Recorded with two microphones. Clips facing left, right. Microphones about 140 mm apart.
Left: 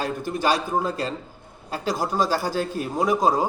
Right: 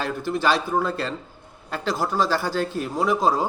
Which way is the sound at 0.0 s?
45° left (ahead or behind).